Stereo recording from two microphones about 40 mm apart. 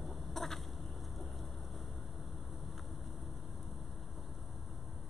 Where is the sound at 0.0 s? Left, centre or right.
Centre.